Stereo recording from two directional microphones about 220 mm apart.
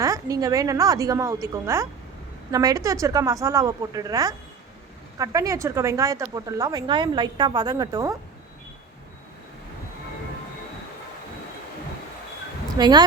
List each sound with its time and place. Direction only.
0.0 s speech: 15° right (ahead or behind)
12.7 s speech: 20° right (ahead or behind)